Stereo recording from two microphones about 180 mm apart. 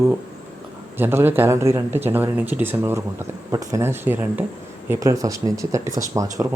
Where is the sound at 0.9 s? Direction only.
10° right (ahead or behind).